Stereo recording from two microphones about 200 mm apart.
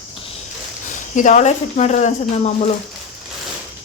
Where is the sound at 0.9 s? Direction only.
40° left (ahead or behind).